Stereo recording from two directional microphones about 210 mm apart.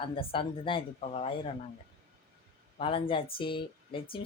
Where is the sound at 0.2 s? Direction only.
25° left (ahead or behind).